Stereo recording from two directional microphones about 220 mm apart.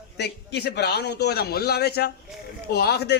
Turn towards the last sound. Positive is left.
turn(degrees=45)  # may be behind; listen again after turning